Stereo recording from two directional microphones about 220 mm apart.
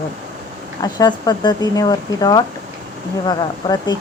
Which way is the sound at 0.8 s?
15° left (ahead or behind).